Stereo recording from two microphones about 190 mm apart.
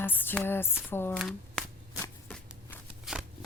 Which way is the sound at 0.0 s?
10° left (ahead or behind).